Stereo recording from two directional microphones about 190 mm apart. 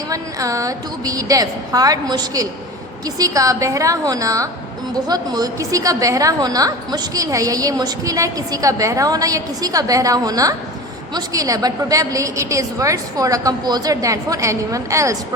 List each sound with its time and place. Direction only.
0.1 s a woman's voice: 15° right (ahead or behind)